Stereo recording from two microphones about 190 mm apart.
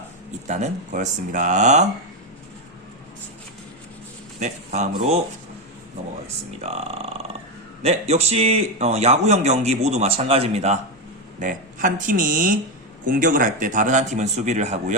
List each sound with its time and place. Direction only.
0.4 s a man's voice: 40° right (ahead or behind)
4.4 s speech: 35° right (ahead or behind)
6.2 s a man's voice: 35° right (ahead or behind)